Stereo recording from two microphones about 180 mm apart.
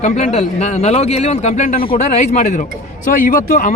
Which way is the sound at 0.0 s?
40° left (ahead or behind).